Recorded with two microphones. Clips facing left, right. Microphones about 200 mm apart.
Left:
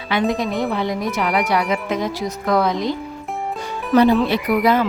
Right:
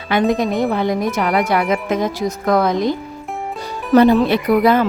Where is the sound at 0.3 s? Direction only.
50° right (ahead or behind).